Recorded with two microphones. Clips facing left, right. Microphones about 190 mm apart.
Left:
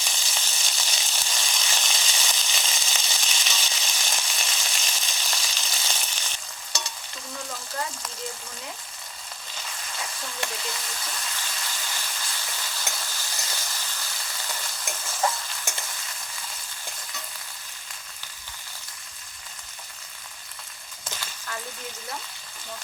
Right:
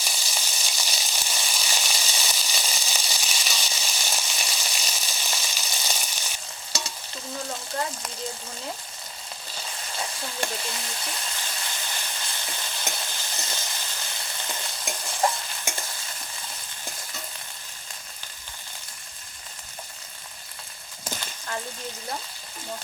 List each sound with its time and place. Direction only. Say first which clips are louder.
0.0 s frying: right 1 dB; 10° right (ahead or behind)
0.8 s sizzle: right 1 dB; 10° right (ahead or behind)
9.6 s frying: right 3 dB; 30° right (ahead or behind)
14.8 s stir: right 3 dB; 15° right (ahead or behind)
15.2 s stir: right 2 dB; 25° right (ahead or behind)